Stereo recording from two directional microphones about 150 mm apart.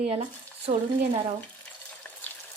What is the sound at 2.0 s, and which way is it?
Frying, 10° left (ahead or behind).